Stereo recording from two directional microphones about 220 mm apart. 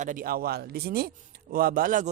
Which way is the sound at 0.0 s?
35° right (ahead or behind).